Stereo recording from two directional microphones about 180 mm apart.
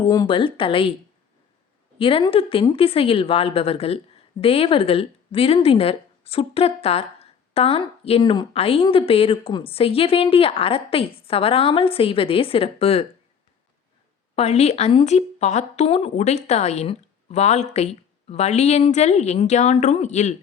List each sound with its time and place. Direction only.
0.1 s speech: 25° left (ahead or behind)
2.0 s speech: 30° left (ahead or behind)
14.3 s speech: 35° left (ahead or behind)